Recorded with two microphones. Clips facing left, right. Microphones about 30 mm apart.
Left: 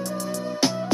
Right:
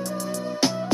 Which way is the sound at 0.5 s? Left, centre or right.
Centre.